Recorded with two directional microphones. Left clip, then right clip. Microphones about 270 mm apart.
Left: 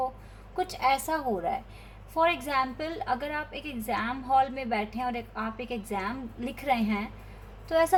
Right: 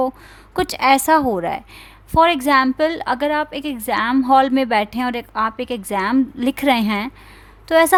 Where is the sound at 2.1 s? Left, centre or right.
Right.